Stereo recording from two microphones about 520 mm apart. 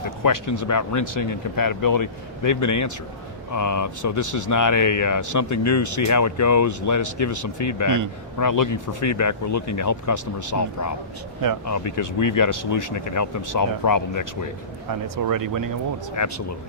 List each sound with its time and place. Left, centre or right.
0.2 s speech: left
7.9 s speech: right
8.4 s speech: left
14.8 s speech: right
16.2 s speech: left